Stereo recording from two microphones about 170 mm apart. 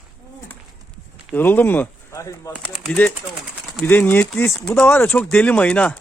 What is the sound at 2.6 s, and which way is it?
Speech, centre (ahead or behind).